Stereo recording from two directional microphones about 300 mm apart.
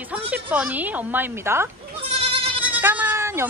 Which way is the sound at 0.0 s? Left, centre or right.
Centre.